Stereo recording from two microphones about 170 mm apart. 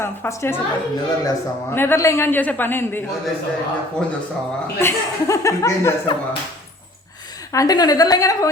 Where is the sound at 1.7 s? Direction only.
15° left (ahead or behind).